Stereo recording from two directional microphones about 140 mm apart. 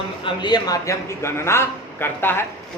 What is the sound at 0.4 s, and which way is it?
A man's voice, 30° left (ahead or behind).